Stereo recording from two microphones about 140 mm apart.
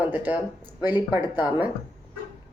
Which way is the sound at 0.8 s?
30° left (ahead or behind).